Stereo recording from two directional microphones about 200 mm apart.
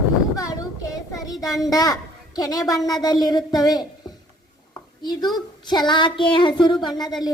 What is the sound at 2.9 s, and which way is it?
Speech, 20° left (ahead or behind).